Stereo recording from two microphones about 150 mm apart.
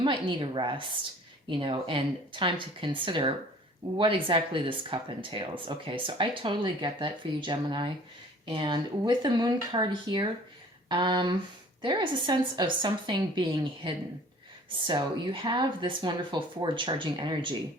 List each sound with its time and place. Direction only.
0.0 s speech: 30° right (ahead or behind)